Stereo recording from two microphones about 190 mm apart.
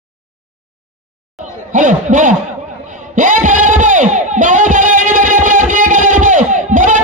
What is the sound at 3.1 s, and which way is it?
Music, 45° right (ahead or behind).